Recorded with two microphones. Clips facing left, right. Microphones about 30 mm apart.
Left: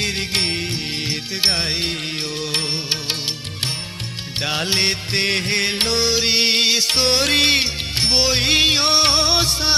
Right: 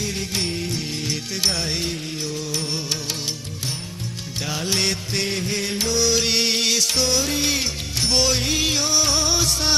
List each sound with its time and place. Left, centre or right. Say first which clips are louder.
0.0 s music: left 4 dB; left
1.0 s music: left 4 dB; left
2.7 s music: left 3 dB; left
4.4 s music: left 5 dB; left
4.7 s music: even; left
5.2 s music: left 7 dB; left
6.1 s music: left 3 dB; left
8.1 s music: left 1 dB; left
8.4 s music: left 6 dB; left